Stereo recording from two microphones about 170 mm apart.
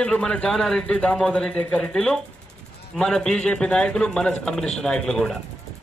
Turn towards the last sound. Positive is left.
turn(degrees=0)  # may be behind; listen again after turning